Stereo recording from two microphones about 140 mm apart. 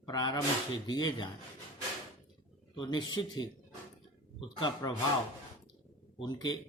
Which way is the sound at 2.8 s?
35° left (ahead or behind).